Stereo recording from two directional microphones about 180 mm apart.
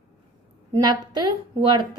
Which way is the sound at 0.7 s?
20° right (ahead or behind).